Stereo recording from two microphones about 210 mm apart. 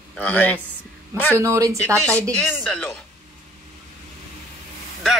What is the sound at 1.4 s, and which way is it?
Speech, 15° right (ahead or behind).